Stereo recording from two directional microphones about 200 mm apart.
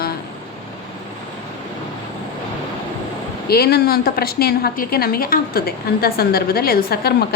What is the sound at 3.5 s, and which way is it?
A woman's voice, 50° left (ahead or behind).